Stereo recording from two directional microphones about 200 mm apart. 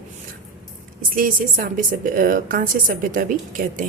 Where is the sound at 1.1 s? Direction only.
45° right (ahead or behind).